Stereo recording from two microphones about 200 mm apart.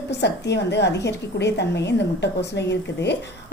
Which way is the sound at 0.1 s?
60° left (ahead or behind).